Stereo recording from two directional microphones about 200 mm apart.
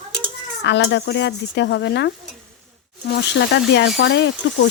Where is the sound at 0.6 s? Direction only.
55° left (ahead or behind).